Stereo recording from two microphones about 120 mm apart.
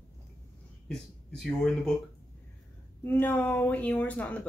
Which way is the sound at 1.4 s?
Centre (ahead or behind).